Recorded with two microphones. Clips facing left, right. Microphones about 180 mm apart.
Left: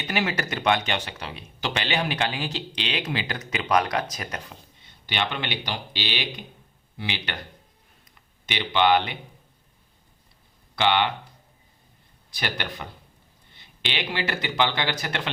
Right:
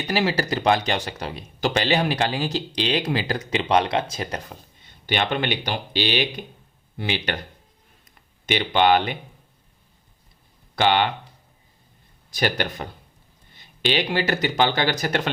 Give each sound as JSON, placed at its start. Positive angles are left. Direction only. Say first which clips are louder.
{"t": 0.0, "sound": "speech", "louder": "right 4 dB", "side_deg": -35}
{"t": 5.0, "sound": "speech", "louder": "right 5 dB", "side_deg": -50}
{"t": 8.4, "sound": "speech", "louder": "right 3 dB", "side_deg": -45}
{"t": 10.8, "sound": "speech", "louder": "right 3 dB", "side_deg": -45}
{"t": 12.3, "sound": "speech", "louder": "right 7 dB", "side_deg": -45}